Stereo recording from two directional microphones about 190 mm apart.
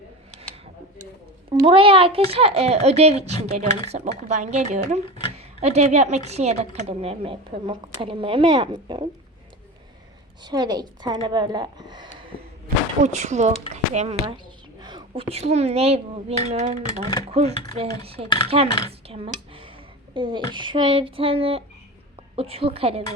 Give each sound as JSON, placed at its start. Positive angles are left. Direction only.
{"t": 1.5, "sound": "speech", "side_deg": -30}
{"t": 10.4, "sound": "a woman's voice", "side_deg": -20}
{"t": 13.0, "sound": "speech", "side_deg": -35}
{"t": 14.8, "sound": "a woman's voice", "side_deg": -25}
{"t": 17.7, "sound": "speech", "side_deg": -30}
{"t": 18.9, "sound": "a sound", "side_deg": -30}
{"t": 20.1, "sound": "a woman's voice", "side_deg": -25}